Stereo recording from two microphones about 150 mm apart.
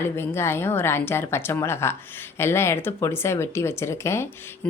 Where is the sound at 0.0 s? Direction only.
15° left (ahead or behind).